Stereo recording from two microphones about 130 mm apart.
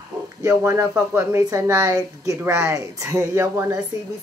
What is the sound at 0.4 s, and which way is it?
Speech, 20° right (ahead or behind).